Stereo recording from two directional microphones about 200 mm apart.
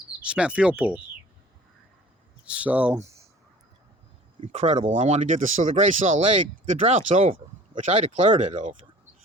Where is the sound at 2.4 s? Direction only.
5° right (ahead or behind).